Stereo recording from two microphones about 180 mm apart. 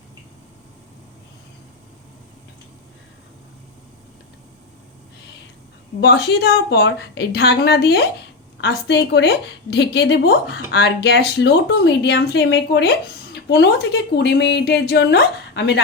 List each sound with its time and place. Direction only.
6.0 s a woman's voice: 65° left (ahead or behind)